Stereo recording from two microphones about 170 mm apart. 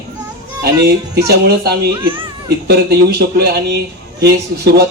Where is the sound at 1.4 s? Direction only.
70° right (ahead or behind).